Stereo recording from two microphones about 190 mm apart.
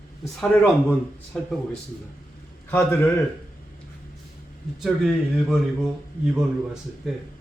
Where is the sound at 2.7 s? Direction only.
10° left (ahead or behind).